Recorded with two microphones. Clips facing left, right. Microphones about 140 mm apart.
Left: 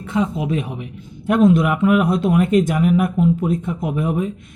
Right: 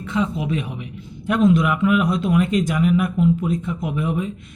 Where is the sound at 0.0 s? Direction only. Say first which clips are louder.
Left 2 dB; 45° left (ahead or behind).